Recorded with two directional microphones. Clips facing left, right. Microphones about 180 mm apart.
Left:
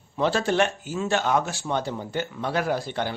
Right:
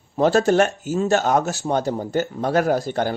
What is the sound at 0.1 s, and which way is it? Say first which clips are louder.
Speech: right 7 dB; 45° right (ahead or behind).